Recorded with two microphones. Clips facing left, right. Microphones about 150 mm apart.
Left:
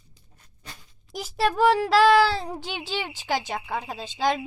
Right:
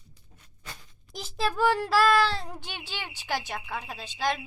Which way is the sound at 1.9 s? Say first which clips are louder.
Left 5 dB; 80° left.